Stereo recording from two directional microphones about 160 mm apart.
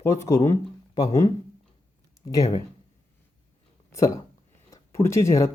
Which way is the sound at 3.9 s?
20° left (ahead or behind).